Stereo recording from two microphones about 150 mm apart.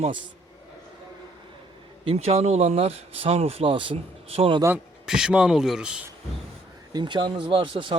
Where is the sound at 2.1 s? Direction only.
40° right (ahead or behind).